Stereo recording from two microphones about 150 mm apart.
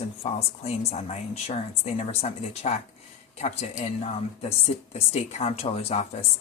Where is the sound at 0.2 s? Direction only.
40° left (ahead or behind).